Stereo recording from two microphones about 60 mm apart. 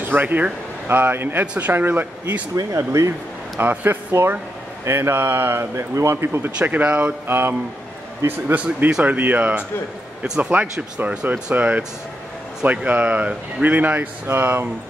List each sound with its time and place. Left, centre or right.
0.0 s speech: right
1.4 s speech: right
2.5 s speech: right
3.7 s speech: right
6.6 s speech: right
7.2 s speech: right
8.5 s speech: right
10.2 s speech: centre
14.2 s speech: right